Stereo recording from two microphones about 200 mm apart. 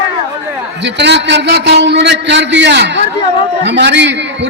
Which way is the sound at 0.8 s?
60° right (ahead or behind).